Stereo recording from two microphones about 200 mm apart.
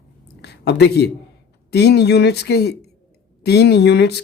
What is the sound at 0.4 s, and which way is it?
Speech, 55° left (ahead or behind).